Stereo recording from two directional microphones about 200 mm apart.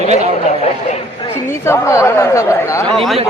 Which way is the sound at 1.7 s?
15° left (ahead or behind).